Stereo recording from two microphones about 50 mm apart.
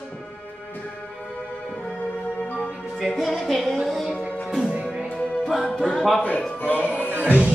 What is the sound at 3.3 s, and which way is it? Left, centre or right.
Music, centre.